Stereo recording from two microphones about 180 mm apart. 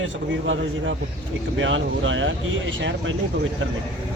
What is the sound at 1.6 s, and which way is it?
Speech, 90° right.